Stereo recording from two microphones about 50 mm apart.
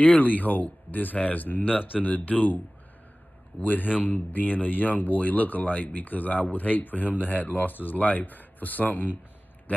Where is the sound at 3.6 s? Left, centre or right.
Left.